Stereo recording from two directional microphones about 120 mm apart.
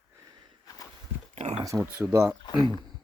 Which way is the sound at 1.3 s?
70° right (ahead or behind).